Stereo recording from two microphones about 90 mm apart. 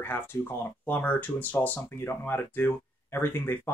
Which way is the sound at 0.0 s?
25° left (ahead or behind).